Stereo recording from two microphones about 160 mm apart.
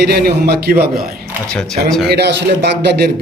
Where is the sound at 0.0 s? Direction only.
80° right.